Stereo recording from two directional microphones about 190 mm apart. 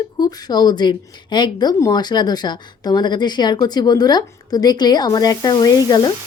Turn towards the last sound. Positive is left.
turn(degrees=20)  # may be behind; listen again after turning